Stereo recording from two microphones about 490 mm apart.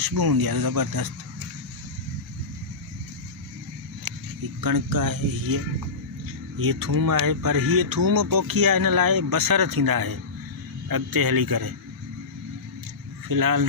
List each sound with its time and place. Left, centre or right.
0.0 s speech: right
4.6 s speech: right
6.6 s speech: right
13.2 s speech: right